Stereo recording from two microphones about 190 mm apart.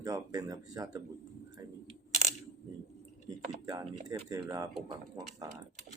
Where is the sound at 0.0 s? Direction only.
20° right (ahead or behind).